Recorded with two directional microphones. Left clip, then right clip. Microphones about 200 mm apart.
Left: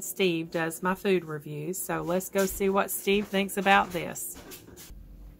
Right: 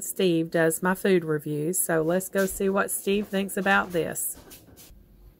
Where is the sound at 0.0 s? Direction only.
25° right (ahead or behind).